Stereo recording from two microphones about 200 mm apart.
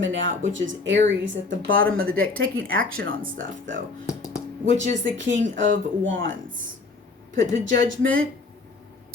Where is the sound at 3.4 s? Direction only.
70° right (ahead or behind).